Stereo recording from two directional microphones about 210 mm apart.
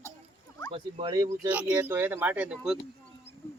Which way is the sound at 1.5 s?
5° right (ahead or behind).